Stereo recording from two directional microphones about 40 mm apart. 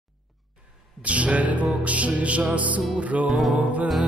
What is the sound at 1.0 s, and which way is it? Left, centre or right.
Music, right.